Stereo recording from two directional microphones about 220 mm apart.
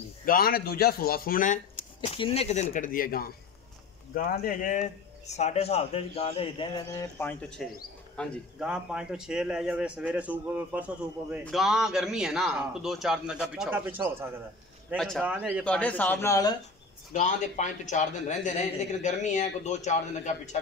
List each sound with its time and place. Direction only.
0.2 s a man's voice: 40° left (ahead or behind)
2.0 s a man's voice: 25° left (ahead or behind); by 15.6 s 5° right (ahead or behind)
15.6 s speech: 5° left (ahead or behind)
17.1 s a man's voice: 35° left (ahead or behind)